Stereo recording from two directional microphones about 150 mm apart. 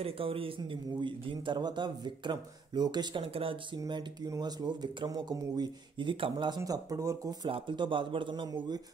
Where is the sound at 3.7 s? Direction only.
25° right (ahead or behind).